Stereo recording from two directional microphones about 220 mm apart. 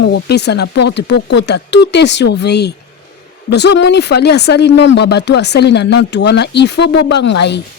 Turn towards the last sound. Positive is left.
turn(degrees=50)  # may be behind; listen again after turning